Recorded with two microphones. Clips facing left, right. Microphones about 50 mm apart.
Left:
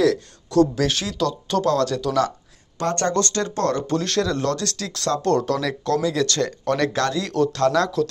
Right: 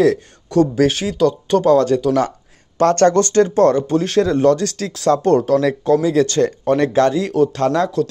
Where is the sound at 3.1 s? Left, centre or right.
Right.